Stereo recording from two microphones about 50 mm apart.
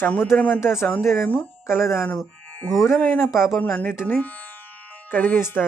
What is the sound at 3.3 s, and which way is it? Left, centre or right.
Speech, left.